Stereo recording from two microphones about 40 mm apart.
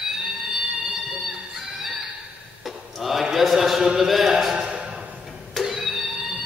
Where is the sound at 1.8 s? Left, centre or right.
Centre.